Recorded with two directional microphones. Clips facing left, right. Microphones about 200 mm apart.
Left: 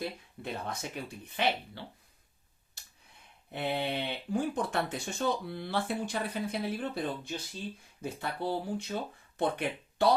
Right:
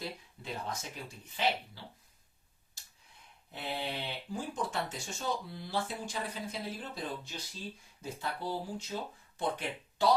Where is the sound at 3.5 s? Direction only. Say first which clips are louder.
Left 6 dB; 60° left (ahead or behind).